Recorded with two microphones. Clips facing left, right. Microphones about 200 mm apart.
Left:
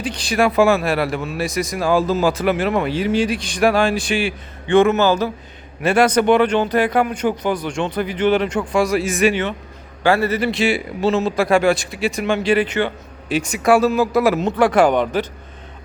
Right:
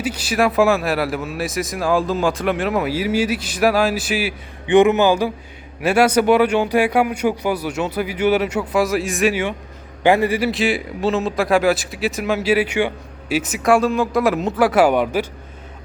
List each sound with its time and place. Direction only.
0.0 s speech: 5° right (ahead or behind)
4.6 s speech: 15° right (ahead or behind)
10.5 s speech: centre (ahead or behind)